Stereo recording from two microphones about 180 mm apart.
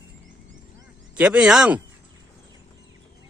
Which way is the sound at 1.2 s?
5° right (ahead or behind).